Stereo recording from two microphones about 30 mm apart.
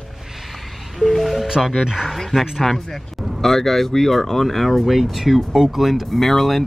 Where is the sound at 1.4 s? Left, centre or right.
Centre.